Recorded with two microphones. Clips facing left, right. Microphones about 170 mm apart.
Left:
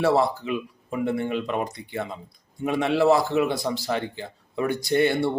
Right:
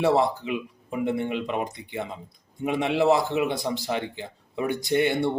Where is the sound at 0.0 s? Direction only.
15° right (ahead or behind).